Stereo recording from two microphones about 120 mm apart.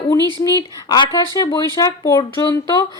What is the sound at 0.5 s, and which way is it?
Speech, 35° left (ahead or behind).